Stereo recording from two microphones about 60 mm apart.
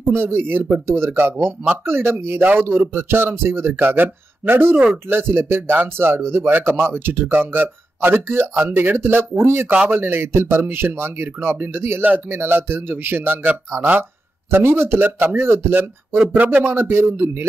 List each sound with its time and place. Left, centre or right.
0.0 s speech: right
9.8 s speech: right